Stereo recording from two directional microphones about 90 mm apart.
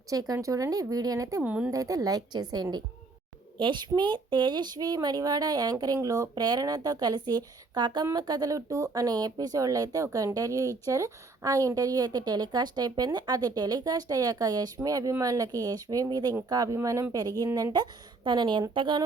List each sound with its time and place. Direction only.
0.1 s speech: 40° right (ahead or behind)
1.4 s speech: 10° right (ahead or behind)
1.7 s speech: 40° right (ahead or behind)
3.6 s a woman's voice: 60° right (ahead or behind)